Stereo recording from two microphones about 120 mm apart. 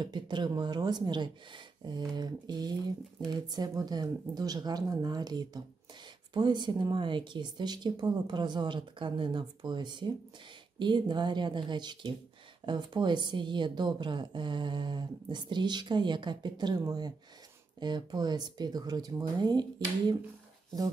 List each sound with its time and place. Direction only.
0.0 s a woman's voice: 40° right (ahead or behind)